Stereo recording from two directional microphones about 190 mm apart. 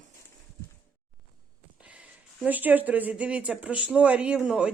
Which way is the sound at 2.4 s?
10° right (ahead or behind).